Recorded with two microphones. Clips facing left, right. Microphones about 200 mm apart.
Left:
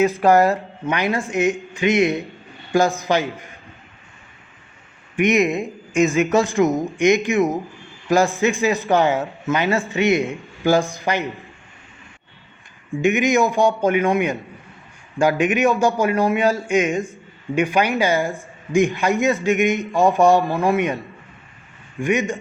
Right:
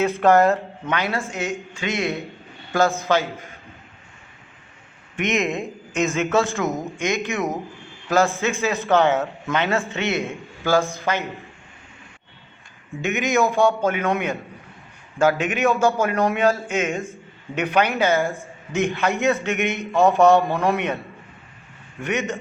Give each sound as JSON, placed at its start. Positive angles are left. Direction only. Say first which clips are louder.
{"t": 0.2, "sound": "a man's voice", "louder": "left 1 dB", "side_deg": 5}
{"t": 5.1, "sound": "speech", "louder": "left 6 dB", "side_deg": 15}
{"t": 5.4, "sound": "speech", "louder": "left 5 dB", "side_deg": 0}
{"t": 6.1, "sound": "a man's voice", "louder": "left 4 dB", "side_deg": 15}
{"t": 9.9, "sound": "a man's voice", "louder": "left 6 dB", "side_deg": 15}
{"t": 13.0, "sound": "a man's voice", "louder": "left 4 dB", "side_deg": 15}
{"t": 22.0, "sound": "a man's voice", "louder": "left 4 dB", "side_deg": 10}